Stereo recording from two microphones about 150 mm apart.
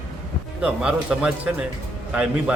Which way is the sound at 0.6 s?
5° right (ahead or behind).